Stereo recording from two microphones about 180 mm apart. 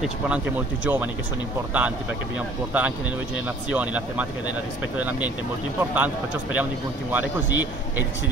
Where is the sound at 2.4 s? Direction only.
10° right (ahead or behind).